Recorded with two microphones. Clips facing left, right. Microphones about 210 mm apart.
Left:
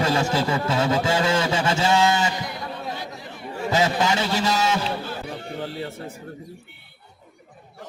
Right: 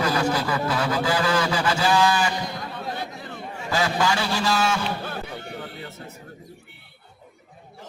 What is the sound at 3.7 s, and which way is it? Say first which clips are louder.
Speech: left 2 dB; 20° left (ahead or behind).